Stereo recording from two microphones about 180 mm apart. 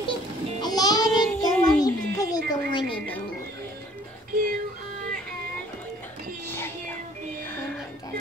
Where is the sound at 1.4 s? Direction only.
20° left (ahead or behind).